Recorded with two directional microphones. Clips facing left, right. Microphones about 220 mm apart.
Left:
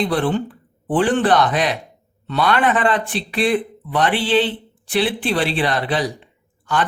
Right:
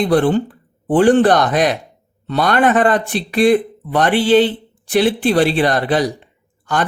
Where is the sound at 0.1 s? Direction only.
40° right (ahead or behind).